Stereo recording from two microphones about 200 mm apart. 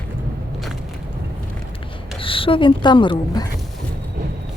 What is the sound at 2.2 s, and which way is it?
Speech, 25° left (ahead or behind).